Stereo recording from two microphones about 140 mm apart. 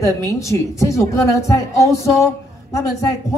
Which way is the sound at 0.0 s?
20° left (ahead or behind).